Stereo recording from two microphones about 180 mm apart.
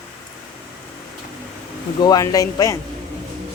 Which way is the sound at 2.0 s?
20° left (ahead or behind).